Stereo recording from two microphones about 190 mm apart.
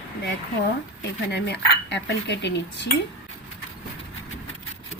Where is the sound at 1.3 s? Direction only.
65° left (ahead or behind).